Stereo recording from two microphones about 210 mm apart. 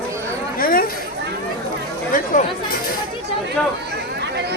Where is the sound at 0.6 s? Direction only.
45° left (ahead or behind).